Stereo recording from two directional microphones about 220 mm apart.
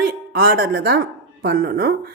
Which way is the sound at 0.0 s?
45° right (ahead or behind).